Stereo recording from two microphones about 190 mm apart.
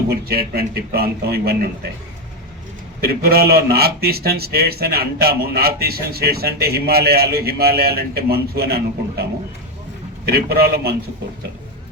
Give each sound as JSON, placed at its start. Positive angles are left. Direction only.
{"t": 0.1, "sound": "a man's voice", "side_deg": -55}
{"t": 3.0, "sound": "speech", "side_deg": -55}
{"t": 10.2, "sound": "speech", "side_deg": -55}